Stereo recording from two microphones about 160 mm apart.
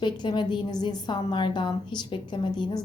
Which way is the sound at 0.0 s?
30° left (ahead or behind).